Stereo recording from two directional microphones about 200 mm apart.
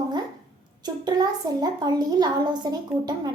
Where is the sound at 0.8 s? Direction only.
20° right (ahead or behind).